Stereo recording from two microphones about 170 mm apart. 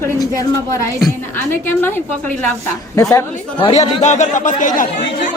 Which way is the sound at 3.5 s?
35° left (ahead or behind).